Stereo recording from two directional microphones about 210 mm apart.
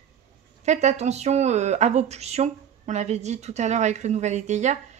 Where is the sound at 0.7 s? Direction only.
30° right (ahead or behind).